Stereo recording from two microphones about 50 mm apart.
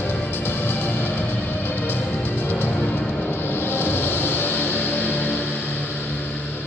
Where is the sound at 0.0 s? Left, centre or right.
Left.